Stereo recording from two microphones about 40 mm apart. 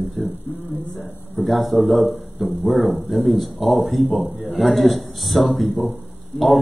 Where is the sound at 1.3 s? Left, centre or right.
Centre.